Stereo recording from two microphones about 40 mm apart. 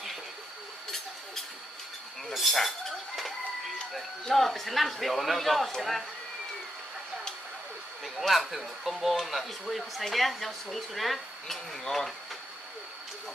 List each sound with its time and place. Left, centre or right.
2.3 s speech: centre
4.3 s speech: centre
8.0 s speech: centre